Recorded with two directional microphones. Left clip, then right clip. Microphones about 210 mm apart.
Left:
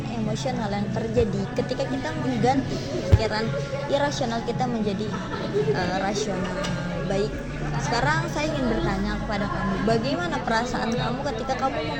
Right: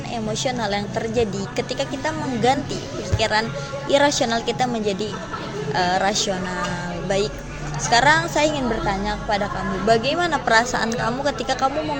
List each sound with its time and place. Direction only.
0.4 s a woman's voice: 45° right (ahead or behind)
7.9 s a woman's voice: 50° right (ahead or behind)